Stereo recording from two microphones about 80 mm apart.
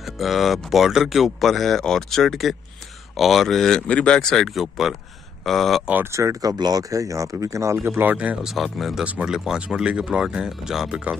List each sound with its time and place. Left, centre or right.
0.0 s speech: centre
6.0 s speech: right
8.0 s speech: centre
8.6 s speech: centre
9.0 s speech: centre